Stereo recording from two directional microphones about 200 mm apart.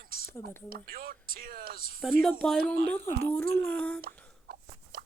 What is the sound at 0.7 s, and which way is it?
Speech, 45° right (ahead or behind).